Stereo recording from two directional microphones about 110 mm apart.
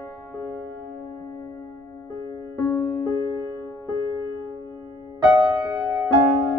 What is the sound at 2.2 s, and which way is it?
Music, 30° left (ahead or behind).